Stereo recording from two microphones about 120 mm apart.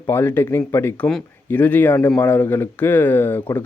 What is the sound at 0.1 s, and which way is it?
Speech, 20° left (ahead or behind).